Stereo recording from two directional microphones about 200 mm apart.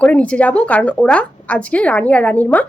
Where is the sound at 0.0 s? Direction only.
5° left (ahead or behind).